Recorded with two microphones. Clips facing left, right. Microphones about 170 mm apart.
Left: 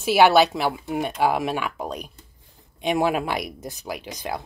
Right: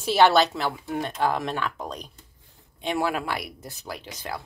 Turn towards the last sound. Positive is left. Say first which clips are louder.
# left 4 dB
turn(degrees=15)  # may be behind; listen again after turning